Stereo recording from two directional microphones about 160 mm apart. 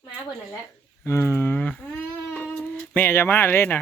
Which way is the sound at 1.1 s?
15° left (ahead or behind).